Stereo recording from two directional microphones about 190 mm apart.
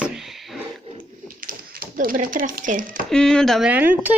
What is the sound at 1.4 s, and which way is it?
Speech, 50° right (ahead or behind).